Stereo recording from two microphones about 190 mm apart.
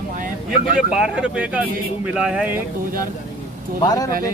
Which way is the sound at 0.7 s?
5° right (ahead or behind).